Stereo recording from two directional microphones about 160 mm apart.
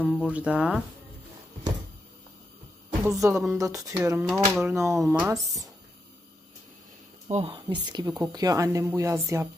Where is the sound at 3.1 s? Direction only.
20° right (ahead or behind).